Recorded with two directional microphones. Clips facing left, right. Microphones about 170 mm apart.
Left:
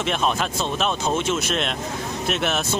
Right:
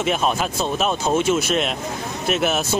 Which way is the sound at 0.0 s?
5° right (ahead or behind).